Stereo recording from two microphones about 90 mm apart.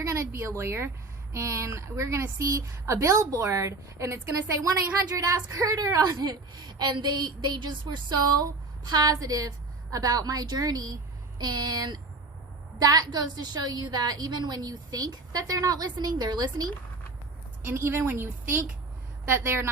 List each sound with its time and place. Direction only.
0.0 s a woman's voice: 30° right (ahead or behind); by 16.7 s 55° right (ahead or behind)
17.7 s speech: 25° right (ahead or behind)